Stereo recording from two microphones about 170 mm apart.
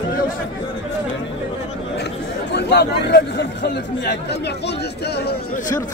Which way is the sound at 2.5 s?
85° left.